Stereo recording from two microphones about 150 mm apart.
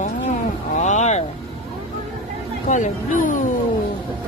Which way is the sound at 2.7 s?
55° left (ahead or behind).